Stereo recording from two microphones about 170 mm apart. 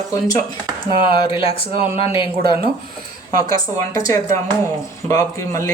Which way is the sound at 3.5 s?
20° left (ahead or behind).